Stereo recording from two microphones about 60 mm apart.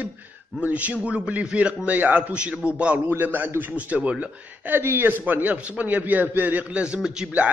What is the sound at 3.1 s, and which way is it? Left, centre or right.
A man's voice, right.